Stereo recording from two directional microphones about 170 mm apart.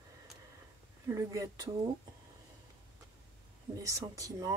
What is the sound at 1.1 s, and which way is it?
Speech, 20° right (ahead or behind).